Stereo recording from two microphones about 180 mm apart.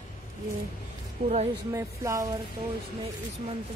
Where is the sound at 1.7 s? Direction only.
15° right (ahead or behind).